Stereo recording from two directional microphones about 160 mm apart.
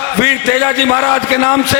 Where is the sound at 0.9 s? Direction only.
20° left (ahead or behind).